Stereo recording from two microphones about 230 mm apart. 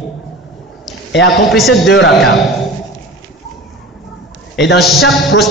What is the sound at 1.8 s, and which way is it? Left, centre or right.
Speech, left.